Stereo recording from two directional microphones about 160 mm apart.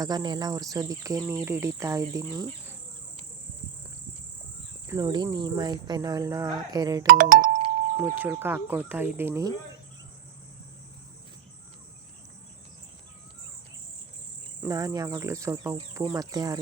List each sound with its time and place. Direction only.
0.0 s speech: 25° right (ahead or behind)
4.9 s speech: 25° right (ahead or behind)
7.1 s speech: 60° right (ahead or behind)
8.0 s speech: 15° right (ahead or behind)
14.7 s speech: 20° right (ahead or behind)